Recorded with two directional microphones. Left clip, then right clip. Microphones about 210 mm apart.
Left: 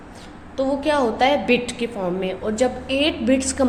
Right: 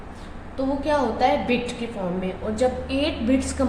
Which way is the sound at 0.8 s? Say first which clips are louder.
Left 2 dB; 45° left (ahead or behind).